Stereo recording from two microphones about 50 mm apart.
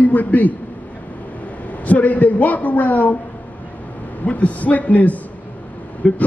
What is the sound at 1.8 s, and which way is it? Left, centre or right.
A man's voice, left.